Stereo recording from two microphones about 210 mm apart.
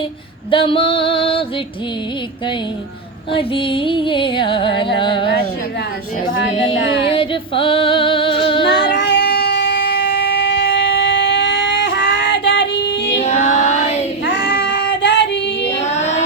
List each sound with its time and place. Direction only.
0.5 s music: 25° left (ahead or behind)
3.3 s music: 25° left (ahead or behind)
7.1 s music: 25° left (ahead or behind)
8.6 s child singing: 55° left (ahead or behind)
13.2 s a sound: 35° left (ahead or behind)
14.3 s child singing: 55° left (ahead or behind)
16.0 s a sound: 35° left (ahead or behind)